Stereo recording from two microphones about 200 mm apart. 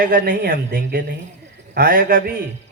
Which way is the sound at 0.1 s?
50° right (ahead or behind).